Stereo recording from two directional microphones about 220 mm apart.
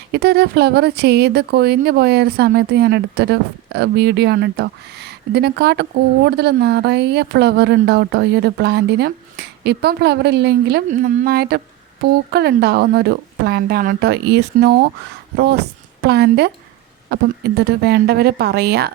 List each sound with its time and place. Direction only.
0.1 s speech: 45° right (ahead or behind)